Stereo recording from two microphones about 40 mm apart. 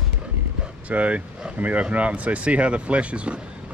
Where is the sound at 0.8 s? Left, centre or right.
Right.